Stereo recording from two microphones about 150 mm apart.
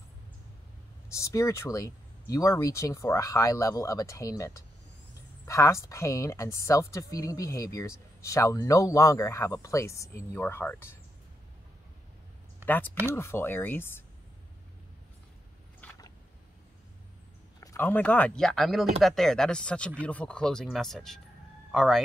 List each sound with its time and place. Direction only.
1.1 s a woman's voice: 20° left (ahead or behind)
12.6 s speech: 10° left (ahead or behind)
17.6 s speech: 20° left (ahead or behind); by 22.0 s centre (ahead or behind)